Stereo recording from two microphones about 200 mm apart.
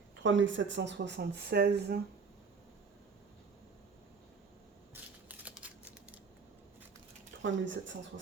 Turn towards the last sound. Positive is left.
turn(degrees=-65)  # may be behind; listen again after turning